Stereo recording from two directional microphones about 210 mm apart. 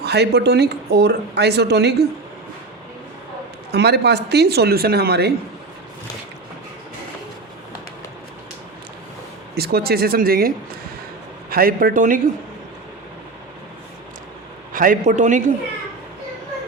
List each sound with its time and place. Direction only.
0.0 s speech: 50° right (ahead or behind)
3.7 s speech: 50° right (ahead or behind)
9.6 s speech: 50° right (ahead or behind)
14.7 s a man's voice: 40° right (ahead or behind)